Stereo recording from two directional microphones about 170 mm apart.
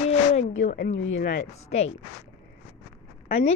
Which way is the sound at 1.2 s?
55° left (ahead or behind).